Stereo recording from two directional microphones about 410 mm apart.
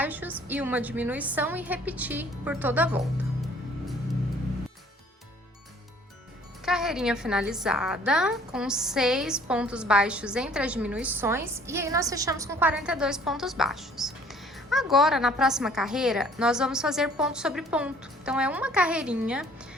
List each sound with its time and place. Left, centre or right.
0.0 s a woman's voice: centre
6.7 s a woman's voice: centre